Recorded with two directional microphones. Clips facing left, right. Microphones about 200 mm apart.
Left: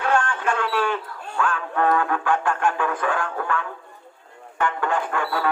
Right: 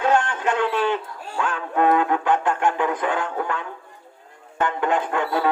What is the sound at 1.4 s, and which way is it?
Speech, 20° right (ahead or behind).